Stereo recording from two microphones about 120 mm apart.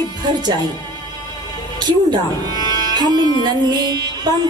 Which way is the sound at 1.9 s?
35° right (ahead or behind).